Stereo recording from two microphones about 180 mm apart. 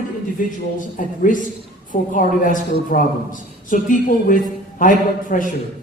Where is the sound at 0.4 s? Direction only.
50° left (ahead or behind).